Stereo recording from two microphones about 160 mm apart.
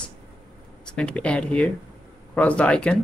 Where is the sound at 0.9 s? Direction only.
5° left (ahead or behind).